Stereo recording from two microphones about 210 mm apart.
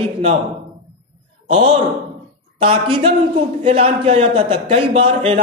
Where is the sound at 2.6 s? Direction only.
25° right (ahead or behind).